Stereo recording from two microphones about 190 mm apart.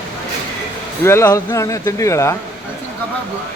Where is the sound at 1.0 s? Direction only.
15° left (ahead or behind).